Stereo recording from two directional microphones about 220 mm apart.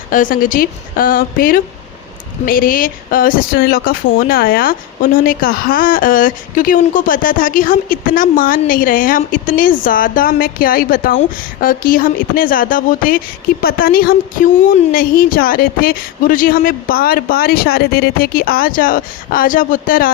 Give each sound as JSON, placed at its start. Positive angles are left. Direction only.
{"t": 0.1, "sound": "speech", "side_deg": 40}